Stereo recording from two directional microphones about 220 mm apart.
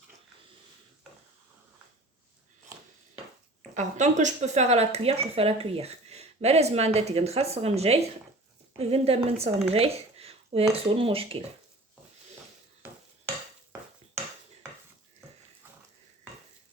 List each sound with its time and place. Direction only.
3.8 s speech: 35° right (ahead or behind)